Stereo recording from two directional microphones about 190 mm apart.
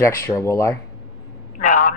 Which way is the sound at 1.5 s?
45° left (ahead or behind).